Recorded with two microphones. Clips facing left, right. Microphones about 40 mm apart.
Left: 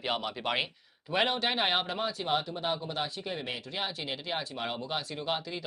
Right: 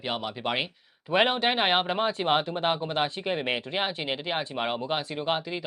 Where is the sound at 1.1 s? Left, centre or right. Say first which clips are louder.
Right 5 dB; right.